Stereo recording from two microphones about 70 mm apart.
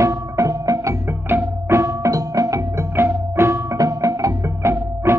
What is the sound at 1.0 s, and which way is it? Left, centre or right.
Music, right.